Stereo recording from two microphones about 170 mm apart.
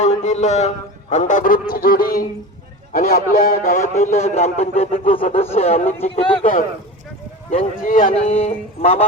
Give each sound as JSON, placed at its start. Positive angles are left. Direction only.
{"t": 0.0, "sound": "a man's voice", "side_deg": 45}
{"t": 6.4, "sound": "a man's voice", "side_deg": 50}